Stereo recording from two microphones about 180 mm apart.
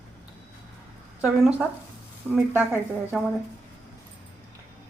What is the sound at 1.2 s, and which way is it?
A woman's voice, 5° right (ahead or behind).